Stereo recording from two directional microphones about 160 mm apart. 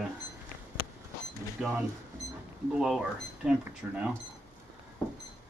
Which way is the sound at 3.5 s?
5° right (ahead or behind).